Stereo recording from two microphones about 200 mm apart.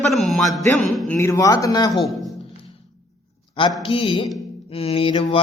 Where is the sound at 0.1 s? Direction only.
Centre (ahead or behind).